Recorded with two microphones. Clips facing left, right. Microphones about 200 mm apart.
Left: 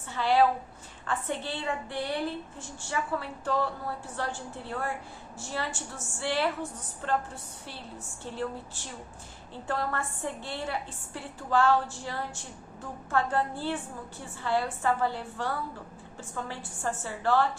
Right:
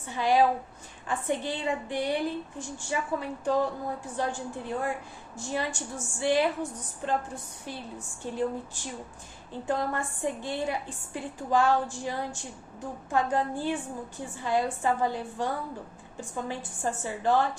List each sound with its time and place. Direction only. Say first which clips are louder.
0.1 s a woman's voice: right 1 dB; 15° right (ahead or behind)